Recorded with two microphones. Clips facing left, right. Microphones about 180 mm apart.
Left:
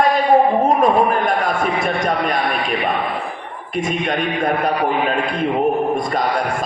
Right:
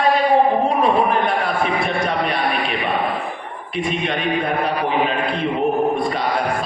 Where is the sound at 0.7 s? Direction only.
45° left (ahead or behind).